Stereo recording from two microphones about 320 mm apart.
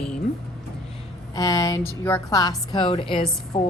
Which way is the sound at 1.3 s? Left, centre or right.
Centre.